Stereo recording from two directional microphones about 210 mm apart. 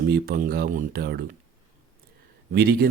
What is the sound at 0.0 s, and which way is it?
Speech, 45° right (ahead or behind).